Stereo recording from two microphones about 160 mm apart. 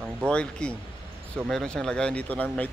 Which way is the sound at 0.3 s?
5° left (ahead or behind).